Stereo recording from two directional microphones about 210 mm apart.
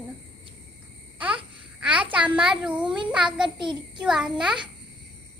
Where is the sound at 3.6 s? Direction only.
20° right (ahead or behind).